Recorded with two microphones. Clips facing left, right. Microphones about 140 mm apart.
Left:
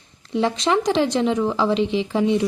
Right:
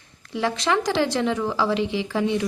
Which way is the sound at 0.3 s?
20° left (ahead or behind).